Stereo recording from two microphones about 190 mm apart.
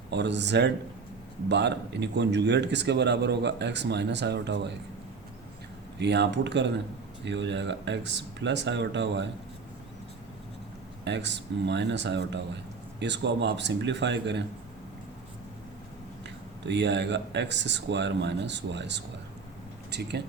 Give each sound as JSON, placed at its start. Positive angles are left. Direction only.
{"t": 0.1, "sound": "speech", "side_deg": -65}
{"t": 6.0, "sound": "speech", "side_deg": -65}
{"t": 11.0, "sound": "speech", "side_deg": -65}
{"t": 16.6, "sound": "speech", "side_deg": -65}